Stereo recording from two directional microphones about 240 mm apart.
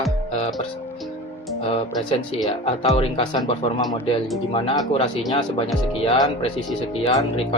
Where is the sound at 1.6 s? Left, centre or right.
Left.